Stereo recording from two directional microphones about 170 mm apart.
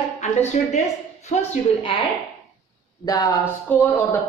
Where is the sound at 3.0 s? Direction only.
20° left (ahead or behind).